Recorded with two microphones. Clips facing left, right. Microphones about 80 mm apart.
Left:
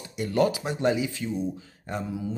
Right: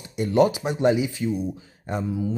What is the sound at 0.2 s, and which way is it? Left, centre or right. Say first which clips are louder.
Speech: right 4 dB; centre.